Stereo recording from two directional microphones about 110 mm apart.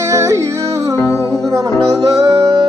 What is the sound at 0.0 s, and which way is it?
Music, 25° right (ahead or behind).